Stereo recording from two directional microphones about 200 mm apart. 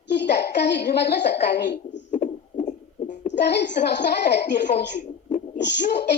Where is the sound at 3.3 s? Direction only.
55° left (ahead or behind).